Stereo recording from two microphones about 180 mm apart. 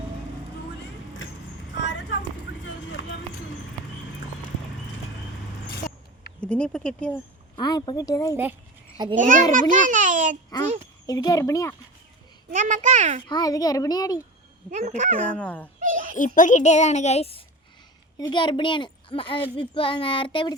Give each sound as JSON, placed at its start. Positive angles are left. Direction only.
{"t": 1.9, "sound": "vehicle", "side_deg": 80}
{"t": 6.4, "sound": "speech", "side_deg": 5}
{"t": 7.5, "sound": "a child's voice", "side_deg": 25}
{"t": 9.1, "sound": "a child's voice", "side_deg": -45}
{"t": 11.0, "sound": "a child's voice", "side_deg": 20}
{"t": 12.5, "sound": "a child's voice", "side_deg": -45}
{"t": 13.2, "sound": "a child's voice", "side_deg": 20}
{"t": 14.7, "sound": "speech", "side_deg": -40}
{"t": 15.3, "sound": "speech", "side_deg": 5}
{"t": 15.8, "sound": "a sound", "side_deg": -45}
{"t": 16.1, "sound": "a woman's voice", "side_deg": 45}